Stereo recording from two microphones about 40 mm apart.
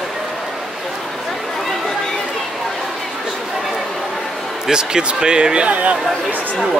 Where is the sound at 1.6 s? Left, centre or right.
Centre.